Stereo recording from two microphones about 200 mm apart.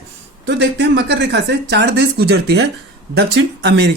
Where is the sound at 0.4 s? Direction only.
60° right (ahead or behind).